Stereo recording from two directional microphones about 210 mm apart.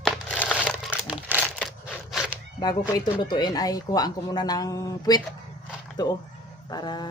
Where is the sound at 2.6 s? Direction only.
20° left (ahead or behind).